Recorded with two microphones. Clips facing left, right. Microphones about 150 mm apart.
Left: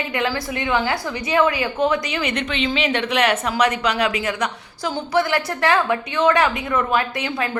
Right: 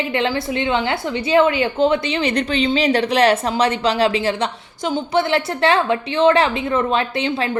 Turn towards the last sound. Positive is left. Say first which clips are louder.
# right 2 dB
turn(degrees=-25)  # may be behind; listen again after turning